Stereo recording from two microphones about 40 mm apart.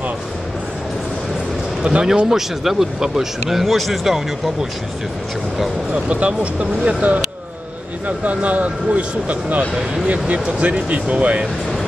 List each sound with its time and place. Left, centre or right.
1.8 s a man's voice: right
2.2 s speech: centre
6.0 s speech: right
8.2 s speech: right